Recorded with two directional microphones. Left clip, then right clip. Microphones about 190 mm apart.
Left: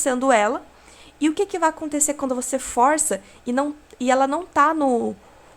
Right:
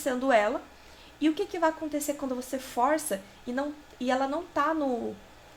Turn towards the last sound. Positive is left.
turn(degrees=50)  # may be behind; listen again after turning